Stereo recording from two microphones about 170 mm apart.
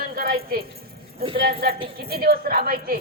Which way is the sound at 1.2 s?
30° right (ahead or behind).